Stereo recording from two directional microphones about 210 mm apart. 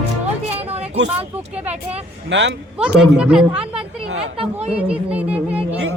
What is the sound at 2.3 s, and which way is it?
Speech, 60° right (ahead or behind).